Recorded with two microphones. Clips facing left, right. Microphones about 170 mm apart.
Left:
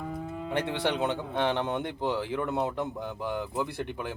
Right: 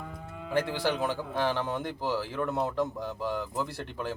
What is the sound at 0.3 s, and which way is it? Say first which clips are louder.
Speech: right 3 dB; 25° left (ahead or behind).